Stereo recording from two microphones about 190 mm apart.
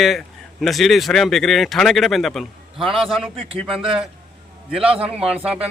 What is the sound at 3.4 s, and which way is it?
Speech, 30° right (ahead or behind).